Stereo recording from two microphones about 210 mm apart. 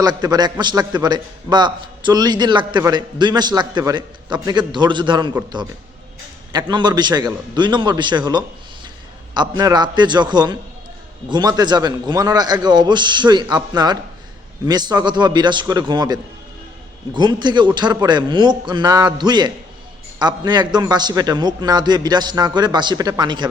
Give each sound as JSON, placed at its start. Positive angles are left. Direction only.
{"t": 0.0, "sound": "a man's voice", "side_deg": -20}
{"t": 6.5, "sound": "a man's voice", "side_deg": -20}
{"t": 17.2, "sound": "a man's voice", "side_deg": -20}